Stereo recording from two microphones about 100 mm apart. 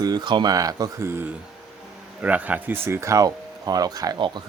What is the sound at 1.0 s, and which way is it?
Speech, 25° right (ahead or behind).